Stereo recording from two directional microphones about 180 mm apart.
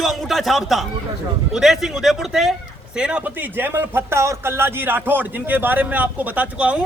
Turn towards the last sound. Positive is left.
turn(degrees=-5)  # may be behind; listen again after turning